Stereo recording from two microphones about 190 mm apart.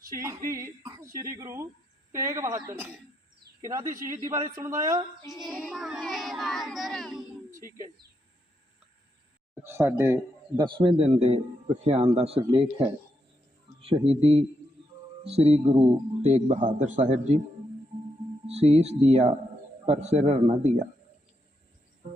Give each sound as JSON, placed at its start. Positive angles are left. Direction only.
{"t": 0.1, "sound": "speech", "side_deg": -15}
{"t": 5.4, "sound": "child singing", "side_deg": 0}
{"t": 9.6, "sound": "speech", "side_deg": -15}
{"t": 10.6, "sound": "a man's voice", "side_deg": -25}
{"t": 18.4, "sound": "a man's voice", "side_deg": -35}
{"t": 22.0, "sound": "cricket", "side_deg": -35}